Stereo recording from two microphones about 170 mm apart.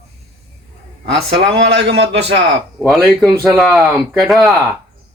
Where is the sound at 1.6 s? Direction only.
75° right (ahead or behind).